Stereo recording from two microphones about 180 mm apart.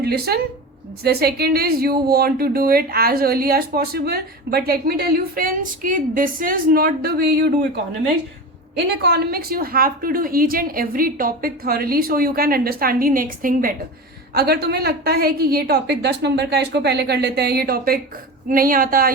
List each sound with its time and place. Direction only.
0.0 s speech: 60° right (ahead or behind)
9.0 s speech: 65° right (ahead or behind)
14.3 s speech: 60° right (ahead or behind)